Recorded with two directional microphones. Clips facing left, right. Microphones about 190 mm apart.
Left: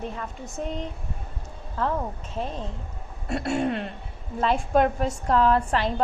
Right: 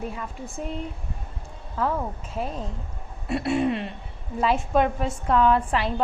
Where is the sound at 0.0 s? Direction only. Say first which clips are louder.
Right 1 dB; 10° right (ahead or behind).